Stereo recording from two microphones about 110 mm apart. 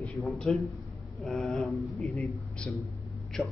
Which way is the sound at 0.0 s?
Centre (ahead or behind).